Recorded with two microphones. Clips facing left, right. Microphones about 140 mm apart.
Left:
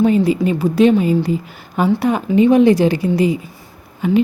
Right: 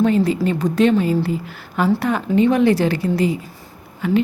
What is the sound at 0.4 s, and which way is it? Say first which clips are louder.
Speech: left 3 dB; 15° left (ahead or behind).